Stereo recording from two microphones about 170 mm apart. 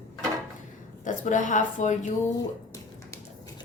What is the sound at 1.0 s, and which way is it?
A woman's voice, 45° left (ahead or behind).